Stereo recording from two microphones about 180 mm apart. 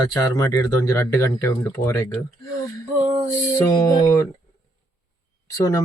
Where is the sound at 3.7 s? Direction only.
20° left (ahead or behind).